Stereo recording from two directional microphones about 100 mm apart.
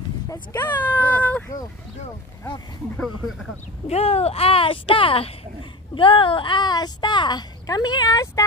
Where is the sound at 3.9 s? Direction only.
90° left.